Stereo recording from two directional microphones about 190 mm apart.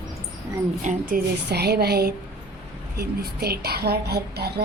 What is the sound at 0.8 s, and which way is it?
Speech, 45° right (ahead or behind).